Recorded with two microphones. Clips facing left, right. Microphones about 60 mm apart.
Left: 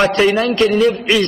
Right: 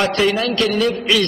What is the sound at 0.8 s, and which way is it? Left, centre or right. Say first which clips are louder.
Speech: left 4 dB; centre.